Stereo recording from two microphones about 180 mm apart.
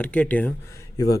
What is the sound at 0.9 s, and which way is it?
Speech, 20° left (ahead or behind).